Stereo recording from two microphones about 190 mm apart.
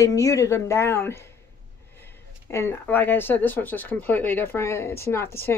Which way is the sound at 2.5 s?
10° left (ahead or behind).